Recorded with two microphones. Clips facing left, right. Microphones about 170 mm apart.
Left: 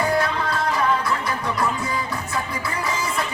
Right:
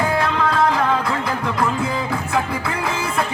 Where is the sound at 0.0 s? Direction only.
90° right.